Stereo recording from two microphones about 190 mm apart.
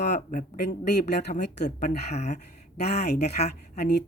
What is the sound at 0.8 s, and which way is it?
Speech, 60° left (ahead or behind).